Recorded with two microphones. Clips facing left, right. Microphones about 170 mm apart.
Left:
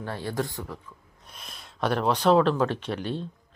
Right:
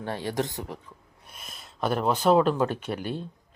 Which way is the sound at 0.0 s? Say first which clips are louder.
Right 1 dB; 15° right (ahead or behind).